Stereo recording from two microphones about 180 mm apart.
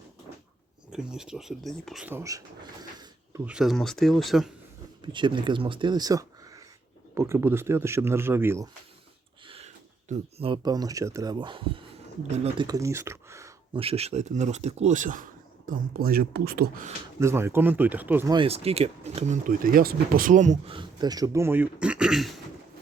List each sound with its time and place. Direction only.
0.9 s speech: 5° right (ahead or behind)
3.4 s speech: 5° right (ahead or behind)
5.0 s speech: 25° right (ahead or behind)
9.5 s speech: 35° right (ahead or behind); by 13.5 s 15° right (ahead or behind)
13.7 s speech: 35° right (ahead or behind); by 16.8 s 60° right (ahead or behind)
17.2 s speech: 15° right (ahead or behind)
18.3 s speech: 30° right (ahead or behind)
20.7 s speech: 20° right (ahead or behind); by 22.4 s centre (ahead or behind)